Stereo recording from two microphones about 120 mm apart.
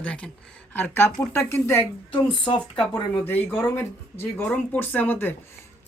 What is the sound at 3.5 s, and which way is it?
Speech, 10° left (ahead or behind).